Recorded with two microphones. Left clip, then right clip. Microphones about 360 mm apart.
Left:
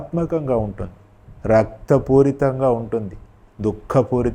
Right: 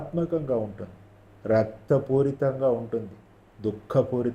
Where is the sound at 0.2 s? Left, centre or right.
Left.